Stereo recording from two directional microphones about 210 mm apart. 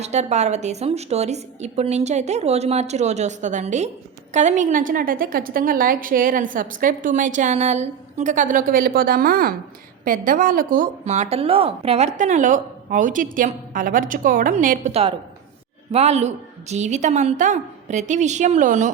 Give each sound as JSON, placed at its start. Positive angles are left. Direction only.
{"t": 0.0, "sound": "a woman's voice", "side_deg": -30}